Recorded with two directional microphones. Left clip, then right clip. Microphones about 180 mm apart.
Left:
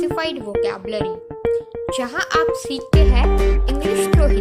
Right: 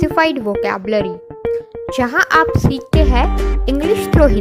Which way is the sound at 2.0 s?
45° right (ahead or behind).